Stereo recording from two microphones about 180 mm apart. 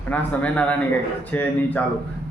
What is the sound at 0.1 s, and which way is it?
A man's voice, 10° left (ahead or behind).